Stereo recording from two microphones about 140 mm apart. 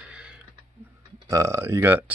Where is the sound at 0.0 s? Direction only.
5° right (ahead or behind).